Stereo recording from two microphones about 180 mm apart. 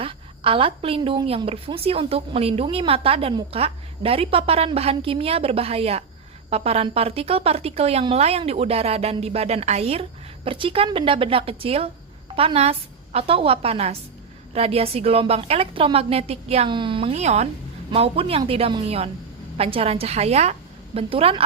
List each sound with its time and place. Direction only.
0.0 s a woman's voice: 30° right (ahead or behind)